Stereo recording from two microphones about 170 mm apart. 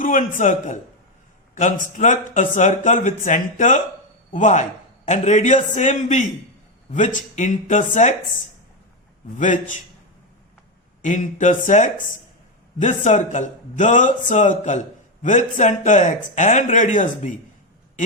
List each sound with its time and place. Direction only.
0.0 s speech: 50° left (ahead or behind)
9.4 s speech: 50° left (ahead or behind)
11.0 s speech: 45° left (ahead or behind)